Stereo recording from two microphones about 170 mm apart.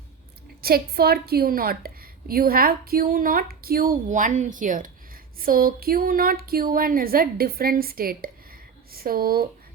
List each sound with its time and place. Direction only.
0.6 s a woman's voice: 65° right (ahead or behind)